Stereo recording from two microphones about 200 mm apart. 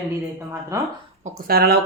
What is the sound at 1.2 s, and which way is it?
Speech, 50° right (ahead or behind).